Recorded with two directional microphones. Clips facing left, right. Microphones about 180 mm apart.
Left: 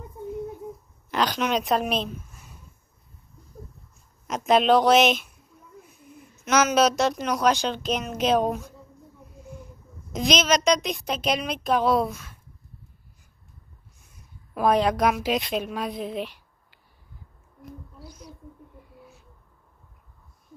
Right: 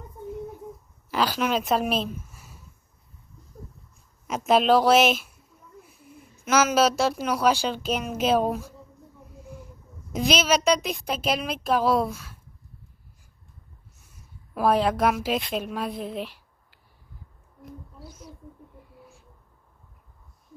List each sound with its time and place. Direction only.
1.1 s speech: 5° right (ahead or behind)
4.3 s speech: 5° right (ahead or behind)
10.1 s speech: 5° right (ahead or behind)
14.5 s speech: 5° right (ahead or behind)
18.0 s speech: 5° right (ahead or behind)